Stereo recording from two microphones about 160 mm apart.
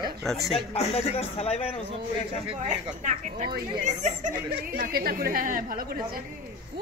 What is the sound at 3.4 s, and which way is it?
Speech, 70° right (ahead or behind).